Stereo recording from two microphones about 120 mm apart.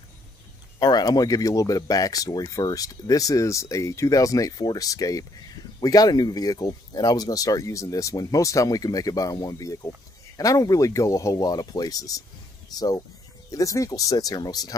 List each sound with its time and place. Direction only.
0.7 s speech: 35° left (ahead or behind)